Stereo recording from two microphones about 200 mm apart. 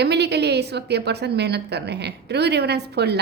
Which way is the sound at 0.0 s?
55° right (ahead or behind).